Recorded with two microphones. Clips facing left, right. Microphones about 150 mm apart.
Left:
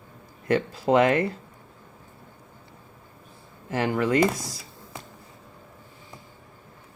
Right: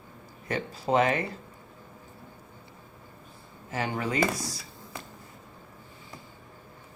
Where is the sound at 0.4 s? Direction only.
60° left (ahead or behind).